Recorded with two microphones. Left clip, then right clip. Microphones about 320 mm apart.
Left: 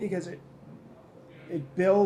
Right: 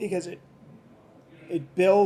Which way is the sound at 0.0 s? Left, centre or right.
Right.